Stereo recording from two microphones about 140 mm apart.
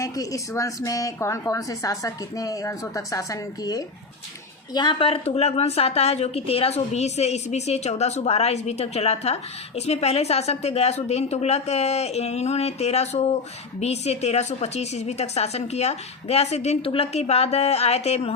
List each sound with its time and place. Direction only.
0.0 s a woman's voice: 25° left (ahead or behind); by 18.3 s 45° left (ahead or behind)